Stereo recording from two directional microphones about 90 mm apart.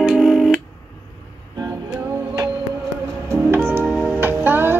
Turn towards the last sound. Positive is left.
turn(degrees=-25)  # may be behind; listen again after turning